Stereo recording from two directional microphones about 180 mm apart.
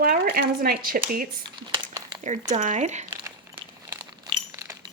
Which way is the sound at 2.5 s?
45° right (ahead or behind).